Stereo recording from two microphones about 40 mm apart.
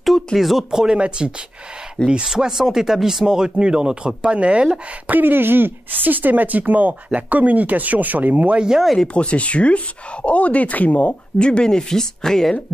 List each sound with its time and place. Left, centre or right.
0.4 s speech: centre
0.9 s speech: right
2.2 s speech: centre; by 4.6 s right
5.2 s speech: right
8.5 s speech: centre
9.0 s speech: left; by 12.5 s centre